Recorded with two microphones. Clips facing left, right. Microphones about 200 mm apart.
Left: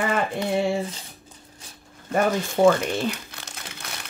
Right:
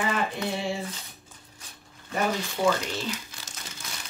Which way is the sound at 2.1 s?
50° left (ahead or behind).